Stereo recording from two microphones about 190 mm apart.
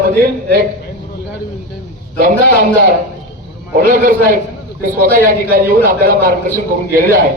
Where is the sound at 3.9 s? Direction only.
45° right (ahead or behind).